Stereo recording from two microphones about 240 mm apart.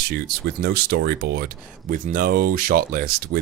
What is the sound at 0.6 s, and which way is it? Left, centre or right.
Speech, right.